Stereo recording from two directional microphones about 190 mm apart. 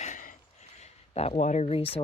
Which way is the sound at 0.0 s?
45° left (ahead or behind).